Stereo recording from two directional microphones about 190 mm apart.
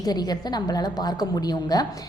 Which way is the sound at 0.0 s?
20° left (ahead or behind).